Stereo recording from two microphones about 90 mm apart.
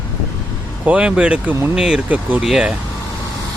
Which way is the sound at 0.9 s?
10° right (ahead or behind).